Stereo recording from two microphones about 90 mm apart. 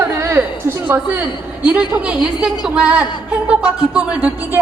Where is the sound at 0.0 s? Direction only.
30° right (ahead or behind).